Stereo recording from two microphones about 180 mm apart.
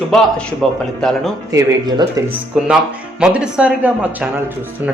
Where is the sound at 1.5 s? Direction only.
20° right (ahead or behind).